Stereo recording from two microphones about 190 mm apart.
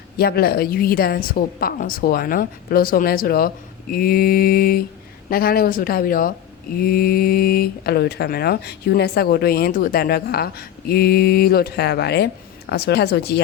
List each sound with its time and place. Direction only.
0.2 s a woman's voice: 55° left (ahead or behind)